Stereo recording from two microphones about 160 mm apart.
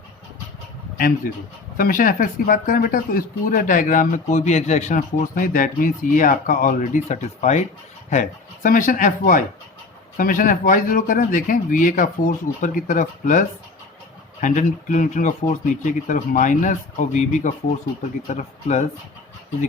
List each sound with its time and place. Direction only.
0.9 s speech: 65° left (ahead or behind)
14.4 s speech: 55° left (ahead or behind)